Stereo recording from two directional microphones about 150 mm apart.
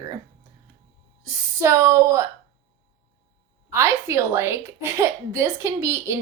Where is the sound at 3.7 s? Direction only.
20° right (ahead or behind).